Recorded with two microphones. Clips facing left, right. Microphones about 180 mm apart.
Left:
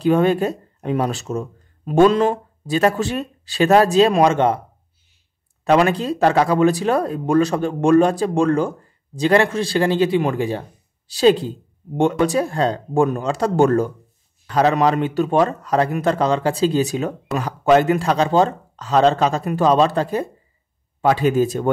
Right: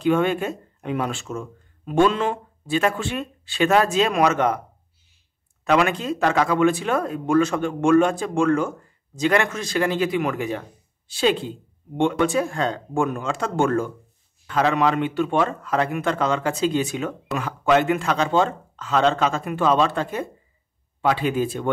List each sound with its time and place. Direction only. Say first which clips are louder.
0.0 s a man's voice: left 4 dB; 35° left (ahead or behind)
5.6 s a man's voice: left 4 dB; 35° left (ahead or behind)